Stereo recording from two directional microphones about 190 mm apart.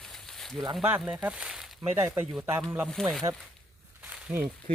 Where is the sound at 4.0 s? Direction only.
5° right (ahead or behind).